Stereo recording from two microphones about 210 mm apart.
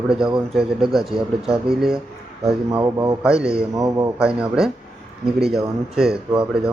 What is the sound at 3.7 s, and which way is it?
Speech, 15° right (ahead or behind).